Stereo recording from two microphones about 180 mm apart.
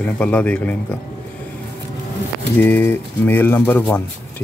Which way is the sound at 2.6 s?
10° left (ahead or behind).